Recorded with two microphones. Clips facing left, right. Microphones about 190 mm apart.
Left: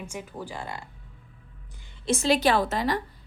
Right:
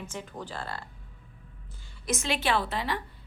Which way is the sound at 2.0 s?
30° left (ahead or behind).